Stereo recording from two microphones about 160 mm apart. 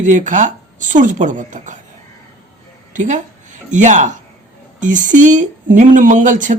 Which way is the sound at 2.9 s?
50° right (ahead or behind).